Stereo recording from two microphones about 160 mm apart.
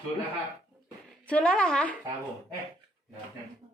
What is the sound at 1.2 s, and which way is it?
Speech, 5° left (ahead or behind).